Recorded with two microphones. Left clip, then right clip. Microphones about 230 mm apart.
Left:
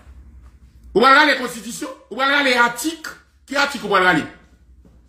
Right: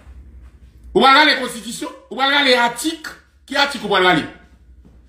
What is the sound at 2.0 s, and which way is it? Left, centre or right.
Speech, left.